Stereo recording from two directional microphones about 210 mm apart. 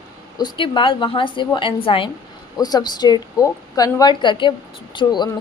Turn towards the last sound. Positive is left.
turn(degrees=20)  # may be behind; listen again after turning